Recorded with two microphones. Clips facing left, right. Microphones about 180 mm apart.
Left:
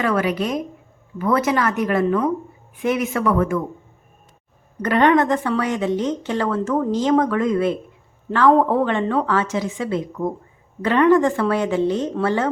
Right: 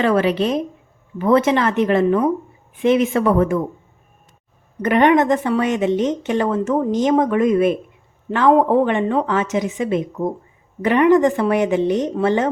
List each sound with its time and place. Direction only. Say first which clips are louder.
0.0 s a woman's voice: right 4 dB; 30° right (ahead or behind)
4.8 s a woman's voice: right 2 dB; 15° right (ahead or behind)